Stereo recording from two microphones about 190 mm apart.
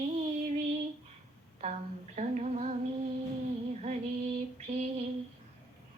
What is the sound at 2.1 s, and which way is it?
Humming, 40° right (ahead or behind).